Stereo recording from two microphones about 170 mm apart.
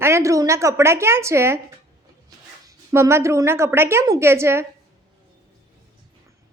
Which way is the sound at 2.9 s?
15° right (ahead or behind).